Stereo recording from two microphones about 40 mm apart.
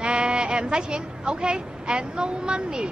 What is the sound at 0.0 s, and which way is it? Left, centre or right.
A woman's voice, right.